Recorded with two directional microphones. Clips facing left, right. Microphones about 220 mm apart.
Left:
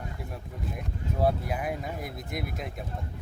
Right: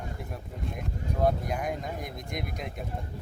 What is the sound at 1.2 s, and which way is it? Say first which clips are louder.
Speech: even; 5° left (ahead or behind).